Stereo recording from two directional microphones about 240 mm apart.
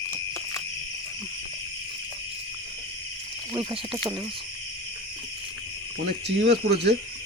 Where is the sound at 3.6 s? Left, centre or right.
Centre.